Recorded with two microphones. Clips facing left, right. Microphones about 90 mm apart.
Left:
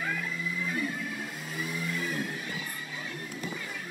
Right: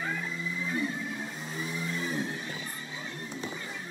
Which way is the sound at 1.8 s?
25° right (ahead or behind).